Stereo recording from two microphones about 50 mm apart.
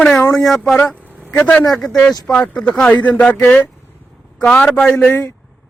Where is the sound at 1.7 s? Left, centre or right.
Centre.